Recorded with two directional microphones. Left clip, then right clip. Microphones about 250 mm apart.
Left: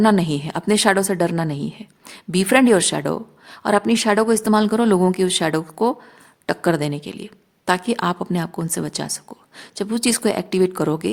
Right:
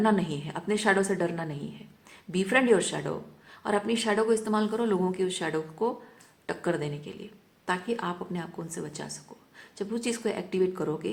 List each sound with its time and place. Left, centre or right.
0.0 s a woman's voice: left